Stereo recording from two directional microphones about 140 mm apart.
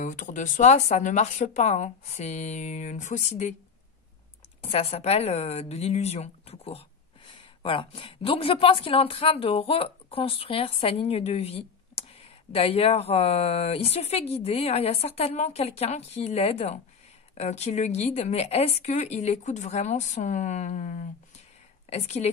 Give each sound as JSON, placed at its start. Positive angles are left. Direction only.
{"t": 0.0, "sound": "speech", "side_deg": 65}
{"t": 4.6, "sound": "speech", "side_deg": 50}